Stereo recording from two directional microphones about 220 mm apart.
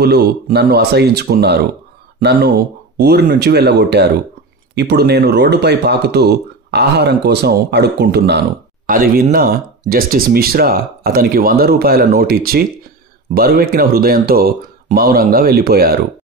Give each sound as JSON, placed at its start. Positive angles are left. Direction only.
{"t": 0.0, "sound": "speech", "side_deg": -45}